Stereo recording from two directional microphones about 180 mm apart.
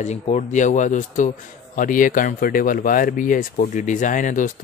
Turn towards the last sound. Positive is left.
turn(degrees=45)  # may be behind; listen again after turning